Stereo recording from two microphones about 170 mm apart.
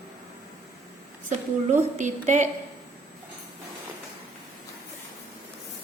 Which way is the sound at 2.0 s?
45° right (ahead or behind).